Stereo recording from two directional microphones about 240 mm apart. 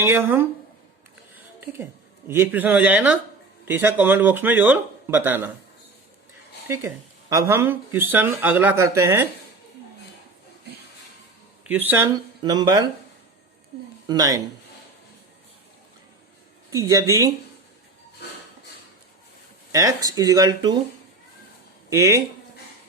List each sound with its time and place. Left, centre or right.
0.0 s speech: centre
1.6 s speech: centre
6.7 s speech: centre
11.6 s speech: centre
14.1 s speech: centre
16.7 s speech: centre
19.7 s speech: centre
21.8 s speech: centre